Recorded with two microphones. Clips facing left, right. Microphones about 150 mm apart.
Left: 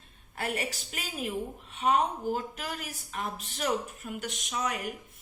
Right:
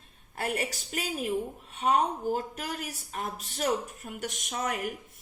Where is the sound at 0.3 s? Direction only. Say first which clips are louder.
Right 2 dB; 35° right (ahead or behind).